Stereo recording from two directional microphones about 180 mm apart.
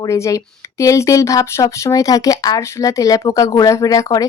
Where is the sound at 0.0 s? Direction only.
15° left (ahead or behind).